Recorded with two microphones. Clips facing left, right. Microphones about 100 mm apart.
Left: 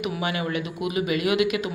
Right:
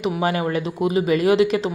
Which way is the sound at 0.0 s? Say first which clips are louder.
Right 6 dB; 35° right (ahead or behind).